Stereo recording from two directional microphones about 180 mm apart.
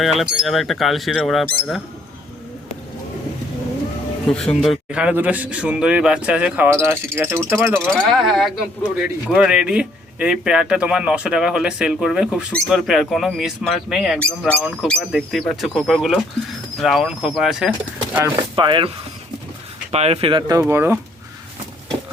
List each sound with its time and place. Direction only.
0.0 s speech: centre (ahead or behind)
4.3 s a man's voice: 5° left (ahead or behind)
7.9 s speech: 5° left (ahead or behind)
18.5 s speech: 25° right (ahead or behind)
19.9 s speech: 35° right (ahead or behind); by 21.0 s 15° right (ahead or behind)